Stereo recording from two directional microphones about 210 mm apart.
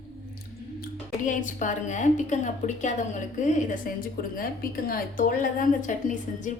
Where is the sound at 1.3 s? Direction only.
35° left (ahead or behind).